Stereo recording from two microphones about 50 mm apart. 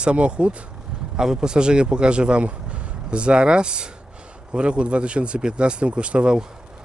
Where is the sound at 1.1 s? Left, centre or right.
Centre.